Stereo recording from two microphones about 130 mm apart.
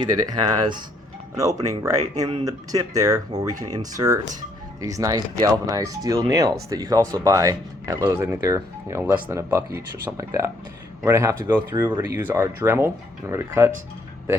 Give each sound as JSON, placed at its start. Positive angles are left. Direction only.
{"t": 1.4, "sound": "speech", "side_deg": -25}